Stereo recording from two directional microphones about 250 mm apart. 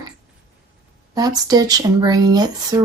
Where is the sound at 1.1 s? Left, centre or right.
Centre.